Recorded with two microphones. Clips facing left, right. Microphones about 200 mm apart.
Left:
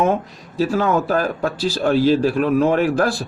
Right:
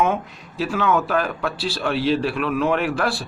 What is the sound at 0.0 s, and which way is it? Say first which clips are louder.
Speech: left 3 dB; 40° left (ahead or behind).